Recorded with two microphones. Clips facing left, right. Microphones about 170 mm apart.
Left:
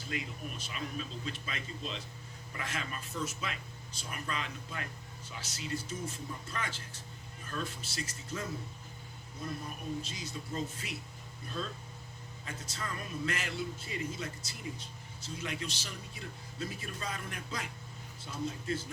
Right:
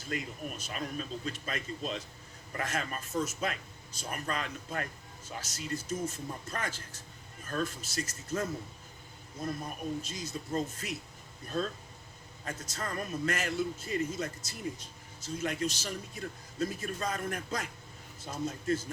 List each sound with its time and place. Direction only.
0.1 s speech: 45° right (ahead or behind)